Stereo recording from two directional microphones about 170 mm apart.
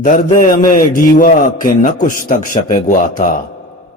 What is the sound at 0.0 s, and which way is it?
A man's voice, 50° left (ahead or behind).